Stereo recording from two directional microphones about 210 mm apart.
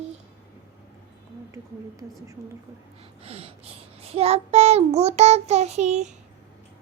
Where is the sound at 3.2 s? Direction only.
30° right (ahead or behind).